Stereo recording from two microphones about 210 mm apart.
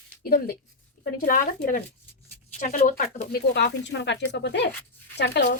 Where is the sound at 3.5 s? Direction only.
55° left (ahead or behind).